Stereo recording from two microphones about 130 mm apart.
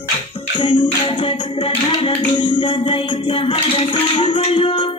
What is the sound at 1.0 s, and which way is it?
Music, 45° left (ahead or behind).